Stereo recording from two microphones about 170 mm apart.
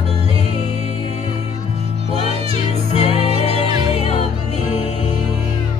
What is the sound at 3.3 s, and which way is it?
Music, 35° right (ahead or behind).